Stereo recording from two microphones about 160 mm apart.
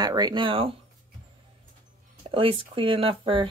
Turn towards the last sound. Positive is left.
turn(degrees=-35)  # may be behind; listen again after turning